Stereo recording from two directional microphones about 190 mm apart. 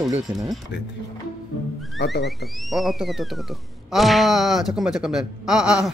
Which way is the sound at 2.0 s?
60° left (ahead or behind).